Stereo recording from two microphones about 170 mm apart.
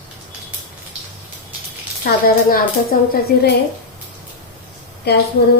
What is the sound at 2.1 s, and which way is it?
Speech, 55° left (ahead or behind).